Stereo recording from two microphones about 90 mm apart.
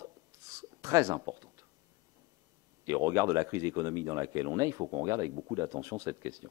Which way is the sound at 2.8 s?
35° right (ahead or behind).